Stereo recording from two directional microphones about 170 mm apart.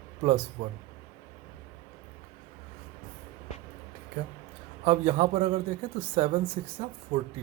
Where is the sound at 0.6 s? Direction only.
45° right (ahead or behind).